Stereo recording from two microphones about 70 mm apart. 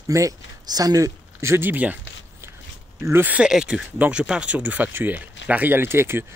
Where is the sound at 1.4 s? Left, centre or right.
Right.